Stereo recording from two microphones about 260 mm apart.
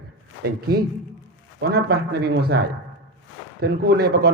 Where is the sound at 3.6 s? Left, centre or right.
Right.